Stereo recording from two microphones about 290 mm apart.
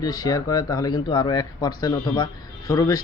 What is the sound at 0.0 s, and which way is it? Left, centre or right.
Speech, centre.